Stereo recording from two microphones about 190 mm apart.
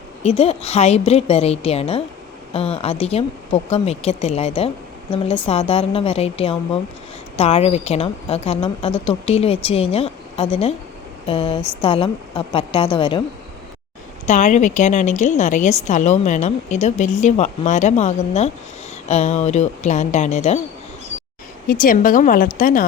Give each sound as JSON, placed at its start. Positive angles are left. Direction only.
{"t": 0.2, "sound": "a woman's voice", "side_deg": 30}
{"t": 14.3, "sound": "a woman's voice", "side_deg": 40}
{"t": 21.7, "sound": "a woman's voice", "side_deg": 45}